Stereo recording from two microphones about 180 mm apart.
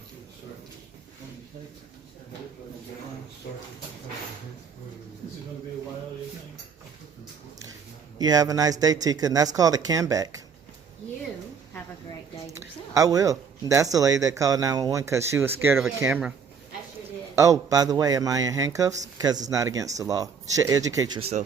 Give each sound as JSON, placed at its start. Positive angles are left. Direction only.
{"t": 8.2, "sound": "speech", "side_deg": -20}
{"t": 12.5, "sound": "a sound", "side_deg": -20}
{"t": 13.9, "sound": "speech", "side_deg": -20}
{"t": 17.3, "sound": "speech", "side_deg": -15}
{"t": 21.2, "sound": "speech", "side_deg": -35}